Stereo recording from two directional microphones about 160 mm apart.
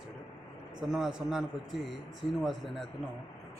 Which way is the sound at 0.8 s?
5° right (ahead or behind).